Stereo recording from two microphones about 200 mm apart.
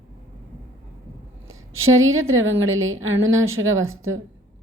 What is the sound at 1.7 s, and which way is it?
A woman's voice, 90° right.